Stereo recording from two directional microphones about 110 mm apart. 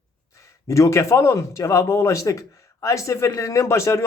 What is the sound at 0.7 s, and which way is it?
Speech, 25° left (ahead or behind).